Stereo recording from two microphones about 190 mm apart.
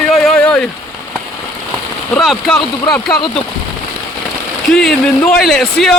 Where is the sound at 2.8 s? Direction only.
20° left (ahead or behind).